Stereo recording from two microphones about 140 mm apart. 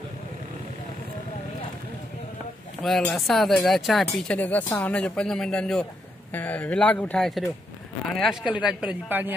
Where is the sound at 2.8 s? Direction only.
Centre (ahead or behind).